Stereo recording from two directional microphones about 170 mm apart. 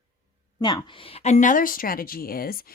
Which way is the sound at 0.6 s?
25° left (ahead or behind).